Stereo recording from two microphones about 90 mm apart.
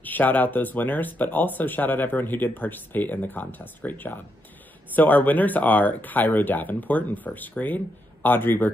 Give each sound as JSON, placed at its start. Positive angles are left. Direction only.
{"t": 0.0, "sound": "speech", "side_deg": 20}